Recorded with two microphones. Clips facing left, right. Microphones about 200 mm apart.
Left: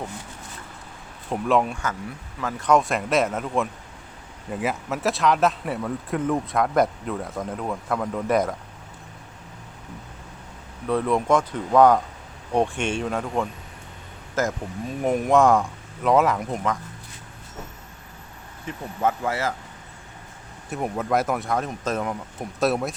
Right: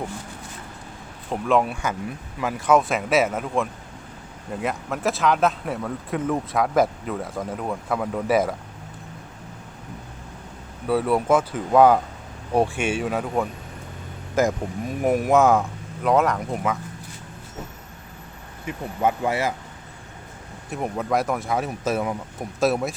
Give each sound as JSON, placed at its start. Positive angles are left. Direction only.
{"t": 1.3, "sound": "speech", "side_deg": 0}
{"t": 10.8, "sound": "speech", "side_deg": -5}
{"t": 18.6, "sound": "speech", "side_deg": -15}
{"t": 20.7, "sound": "speech", "side_deg": 0}